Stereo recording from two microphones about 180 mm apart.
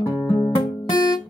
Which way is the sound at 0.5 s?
25° left (ahead or behind).